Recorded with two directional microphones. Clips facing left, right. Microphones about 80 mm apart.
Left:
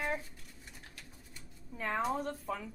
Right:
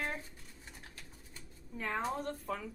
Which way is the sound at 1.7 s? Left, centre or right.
Centre.